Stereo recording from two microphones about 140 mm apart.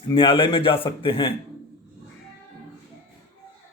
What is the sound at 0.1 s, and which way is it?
A man's voice, 40° left (ahead or behind).